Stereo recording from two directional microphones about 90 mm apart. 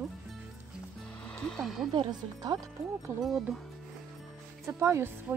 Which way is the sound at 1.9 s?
55° right (ahead or behind).